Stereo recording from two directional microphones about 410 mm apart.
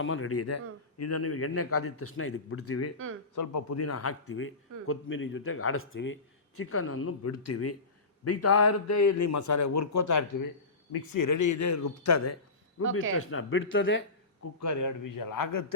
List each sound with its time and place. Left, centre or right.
0.0 s speech: left
3.3 s a man's voice: left
13.1 s speech: left
14.6 s a man's voice: left